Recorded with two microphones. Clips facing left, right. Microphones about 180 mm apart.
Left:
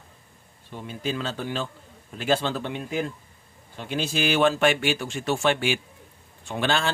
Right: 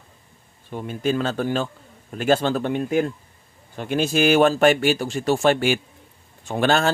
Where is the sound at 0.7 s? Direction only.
50° right (ahead or behind).